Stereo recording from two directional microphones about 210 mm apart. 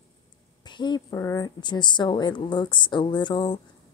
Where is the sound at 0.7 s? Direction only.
20° left (ahead or behind).